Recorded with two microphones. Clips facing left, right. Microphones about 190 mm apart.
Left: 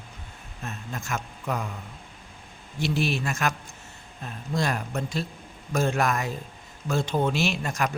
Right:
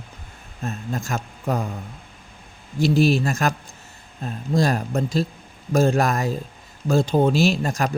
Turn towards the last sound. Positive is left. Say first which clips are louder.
# right 6 dB
turn(degrees=-35)  # may be behind; listen again after turning